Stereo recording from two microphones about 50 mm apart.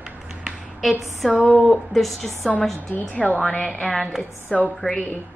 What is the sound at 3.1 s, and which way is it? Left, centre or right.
Speech, centre.